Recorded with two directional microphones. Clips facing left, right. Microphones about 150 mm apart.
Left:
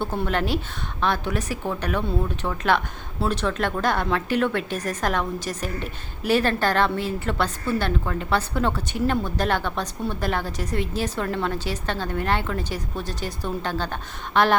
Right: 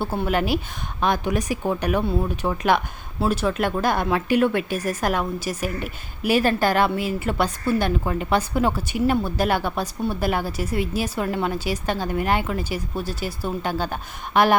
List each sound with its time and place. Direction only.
0.0 s speech: 10° right (ahead or behind)